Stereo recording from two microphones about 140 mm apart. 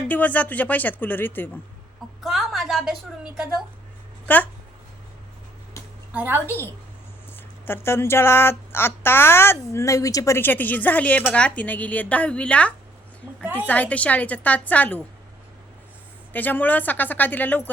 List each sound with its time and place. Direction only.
0.1 s speech: 10° left (ahead or behind)
2.2 s a woman's voice: centre (ahead or behind)
4.3 s speech: 10° left (ahead or behind)
6.1 s a woman's voice: 15° right (ahead or behind)
7.7 s speech: 20° left (ahead or behind)
13.4 s speech: 10° right (ahead or behind)
13.7 s speech: 10° left (ahead or behind)
16.3 s speech: 15° left (ahead or behind)